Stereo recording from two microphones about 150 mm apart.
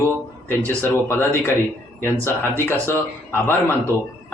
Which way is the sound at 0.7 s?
15° left (ahead or behind).